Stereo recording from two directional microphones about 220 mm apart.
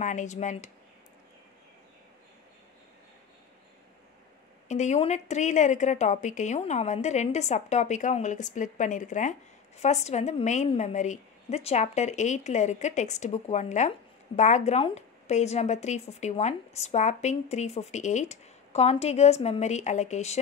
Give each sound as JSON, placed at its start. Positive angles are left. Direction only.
{"t": 0.0, "sound": "a woman's voice", "side_deg": 35}
{"t": 4.6, "sound": "a woman's voice", "side_deg": 30}